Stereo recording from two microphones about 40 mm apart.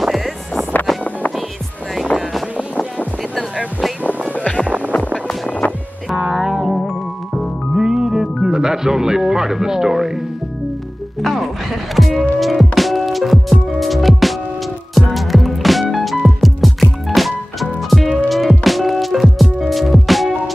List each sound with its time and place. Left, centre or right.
0.0 s music: centre
4.4 s music: left
4.6 s music: right
5.6 s music: left
6.3 s music: centre
8.5 s a man's voice: centre
11.2 s music: centre